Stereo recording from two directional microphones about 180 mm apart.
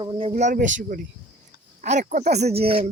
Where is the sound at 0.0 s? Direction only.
30° right (ahead or behind).